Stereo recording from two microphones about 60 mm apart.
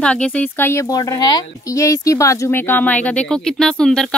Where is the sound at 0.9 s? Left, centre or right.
Left.